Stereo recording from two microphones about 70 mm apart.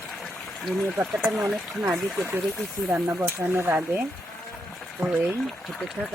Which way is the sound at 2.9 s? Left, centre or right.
Right.